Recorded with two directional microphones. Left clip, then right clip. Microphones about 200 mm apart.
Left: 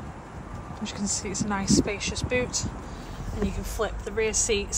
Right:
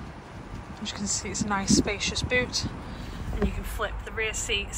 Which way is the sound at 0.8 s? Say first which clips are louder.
Even; 15° left (ahead or behind).